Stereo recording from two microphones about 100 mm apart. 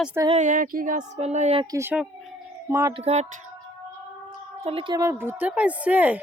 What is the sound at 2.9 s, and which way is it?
Speech, 90° right.